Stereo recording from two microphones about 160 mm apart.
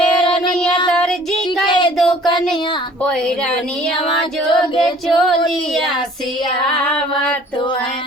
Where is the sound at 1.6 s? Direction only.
25° left (ahead or behind).